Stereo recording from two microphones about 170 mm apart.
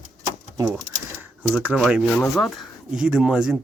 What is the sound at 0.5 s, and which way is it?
Cash register, 15° right (ahead or behind).